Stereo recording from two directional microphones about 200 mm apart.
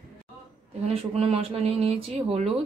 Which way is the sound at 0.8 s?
30° right (ahead or behind).